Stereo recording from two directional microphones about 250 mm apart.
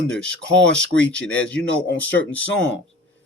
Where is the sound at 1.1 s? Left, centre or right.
Centre.